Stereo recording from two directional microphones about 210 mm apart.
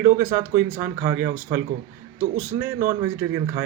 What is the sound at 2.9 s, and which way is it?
Speech, 10° right (ahead or behind).